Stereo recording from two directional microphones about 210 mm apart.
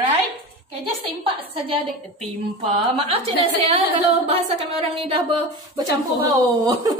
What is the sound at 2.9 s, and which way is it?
A woman's voice, 30° right (ahead or behind).